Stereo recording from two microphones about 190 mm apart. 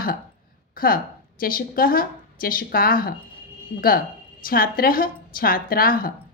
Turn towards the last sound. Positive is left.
turn(degrees=50)  # may be behind; listen again after turning